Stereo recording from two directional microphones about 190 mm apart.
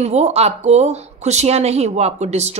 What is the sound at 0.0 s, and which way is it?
Speech, 35° right (ahead or behind).